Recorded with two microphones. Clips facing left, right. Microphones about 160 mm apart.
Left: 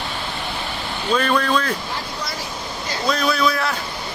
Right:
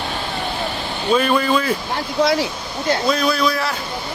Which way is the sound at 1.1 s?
10° right (ahead or behind).